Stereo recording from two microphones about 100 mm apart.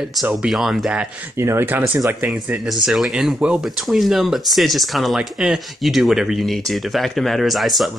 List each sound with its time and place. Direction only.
0.2 s speech: 5° right (ahead or behind)
1.4 s speech: 25° right (ahead or behind)
2.9 s speech: 5° right (ahead or behind)